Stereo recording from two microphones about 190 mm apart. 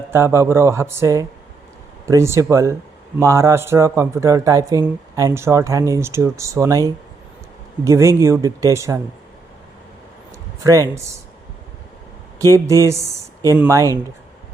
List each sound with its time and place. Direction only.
0.1 s speech: 15° right (ahead or behind)
10.6 s speech: 15° right (ahead or behind)
12.4 s speech: 15° right (ahead or behind)